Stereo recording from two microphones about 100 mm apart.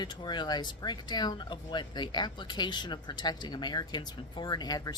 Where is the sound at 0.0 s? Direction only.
50° left (ahead or behind).